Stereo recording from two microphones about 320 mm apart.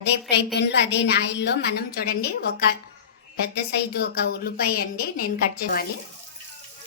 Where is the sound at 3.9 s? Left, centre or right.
Left.